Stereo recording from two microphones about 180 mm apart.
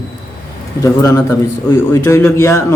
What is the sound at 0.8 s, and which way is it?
A man's voice, 15° left (ahead or behind).